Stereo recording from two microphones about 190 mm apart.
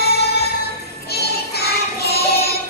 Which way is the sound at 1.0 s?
55° left (ahead or behind).